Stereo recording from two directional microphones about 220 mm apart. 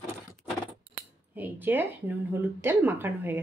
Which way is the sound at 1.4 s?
10° right (ahead or behind).